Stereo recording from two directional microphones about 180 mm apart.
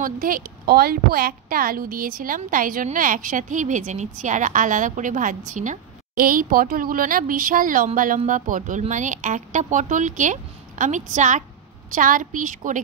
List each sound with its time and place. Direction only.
0.0 s a woman's voice: 50° right (ahead or behind)